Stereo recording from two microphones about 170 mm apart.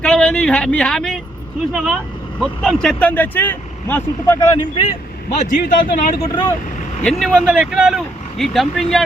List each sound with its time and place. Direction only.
0.0 s speech: 5° left (ahead or behind); by 4.9 s 30° left (ahead or behind)
5.4 s a man's voice: 50° left (ahead or behind)
7.0 s speech: centre (ahead or behind)